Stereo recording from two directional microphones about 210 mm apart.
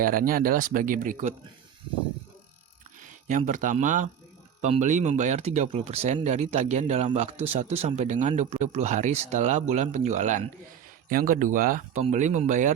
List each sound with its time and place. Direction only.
0.0 s speech: 40° right (ahead or behind)
3.0 s speech: 35° right (ahead or behind)